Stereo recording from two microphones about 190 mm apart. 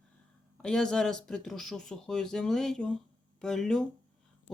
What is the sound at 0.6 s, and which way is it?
Speech, 5° left (ahead or behind).